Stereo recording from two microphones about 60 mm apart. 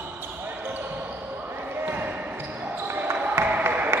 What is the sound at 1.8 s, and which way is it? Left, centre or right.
Basketball bounce, right.